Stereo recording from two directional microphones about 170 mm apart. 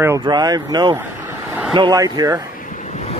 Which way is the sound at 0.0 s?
20° right (ahead or behind).